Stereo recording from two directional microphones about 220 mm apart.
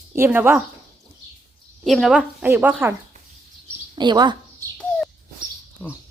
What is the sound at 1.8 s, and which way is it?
A woman's voice, centre (ahead or behind).